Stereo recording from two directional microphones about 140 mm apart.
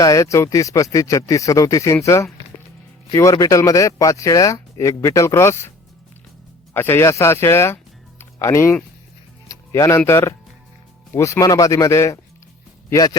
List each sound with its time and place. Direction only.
0.0 s speech: 20° left (ahead or behind)
2.5 s music: 15° left (ahead or behind)
3.1 s speech: 25° left (ahead or behind)
6.7 s speech: 15° left (ahead or behind)
9.5 s music: 20° left (ahead or behind)
10.1 s speech: 20° left (ahead or behind)